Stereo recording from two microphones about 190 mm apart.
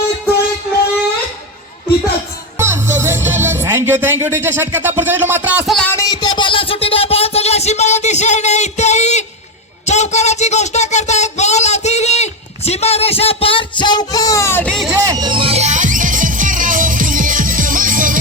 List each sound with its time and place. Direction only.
2.6 s music: 15° right (ahead or behind)
5.7 s speech: 10° left (ahead or behind)
6.2 s a sound: 25° left (ahead or behind)
9.8 s speech: 35° left (ahead or behind); by 14.9 s centre (ahead or behind)
14.9 s music: 20° right (ahead or behind); by 18.2 s 45° right (ahead or behind)